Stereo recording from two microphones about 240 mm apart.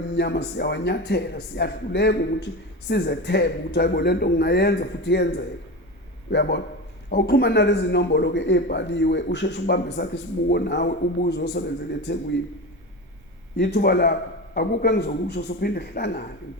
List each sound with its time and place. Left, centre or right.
0.2 s speech: left
13.6 s speech: left